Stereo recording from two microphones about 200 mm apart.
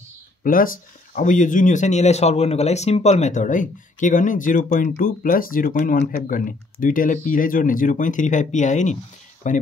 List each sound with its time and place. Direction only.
0.4 s speech: 45° left (ahead or behind)